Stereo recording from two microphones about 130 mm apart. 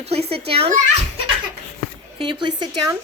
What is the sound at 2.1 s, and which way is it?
Speech, 40° right (ahead or behind).